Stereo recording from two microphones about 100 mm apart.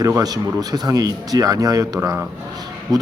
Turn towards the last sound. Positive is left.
turn(degrees=-40)  # may be behind; listen again after turning